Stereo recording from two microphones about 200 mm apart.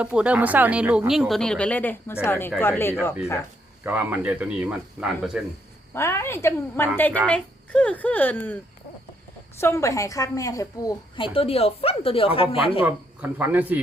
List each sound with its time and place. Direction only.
0.0 s a woman's voice: 5° right (ahead or behind); by 2.9 s 10° left (ahead or behind)
3.8 s speech: 10° right (ahead or behind)
5.9 s a woman's voice: 15° left (ahead or behind)
9.6 s a woman's voice: 15° left (ahead or behind)
11.3 s a woman's voice: 30° left (ahead or behind)
12.8 s speech: 10° right (ahead or behind)